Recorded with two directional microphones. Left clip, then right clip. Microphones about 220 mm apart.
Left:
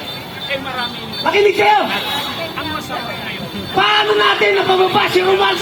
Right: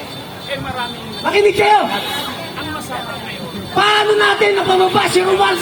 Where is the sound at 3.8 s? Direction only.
60° right (ahead or behind).